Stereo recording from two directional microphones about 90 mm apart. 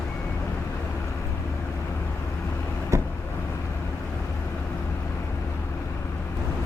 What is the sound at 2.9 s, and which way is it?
Vehicle, 35° right (ahead or behind).